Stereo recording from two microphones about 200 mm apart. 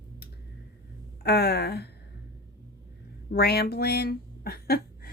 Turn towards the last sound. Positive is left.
turn(degrees=50)  # may be behind; listen again after turning